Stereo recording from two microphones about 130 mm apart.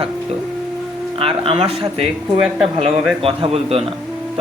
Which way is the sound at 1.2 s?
45° right (ahead or behind).